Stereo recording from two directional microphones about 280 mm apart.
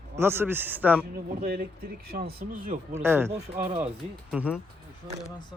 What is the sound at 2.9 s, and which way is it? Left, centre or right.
A man's voice, centre.